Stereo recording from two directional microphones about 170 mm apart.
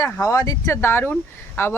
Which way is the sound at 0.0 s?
20° left (ahead or behind).